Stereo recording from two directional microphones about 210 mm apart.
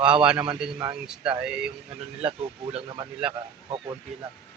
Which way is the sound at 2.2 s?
25° right (ahead or behind).